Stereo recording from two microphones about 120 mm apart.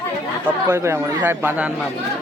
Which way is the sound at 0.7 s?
20° right (ahead or behind).